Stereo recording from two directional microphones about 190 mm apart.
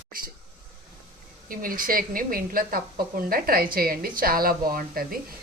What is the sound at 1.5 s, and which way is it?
Speech, 45° right (ahead or behind).